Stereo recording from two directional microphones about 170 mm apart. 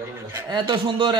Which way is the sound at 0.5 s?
30° right (ahead or behind).